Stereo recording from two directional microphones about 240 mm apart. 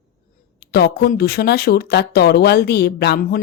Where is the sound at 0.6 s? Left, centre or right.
Left.